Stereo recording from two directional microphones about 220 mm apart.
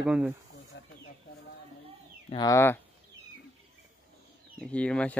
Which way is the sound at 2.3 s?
15° left (ahead or behind).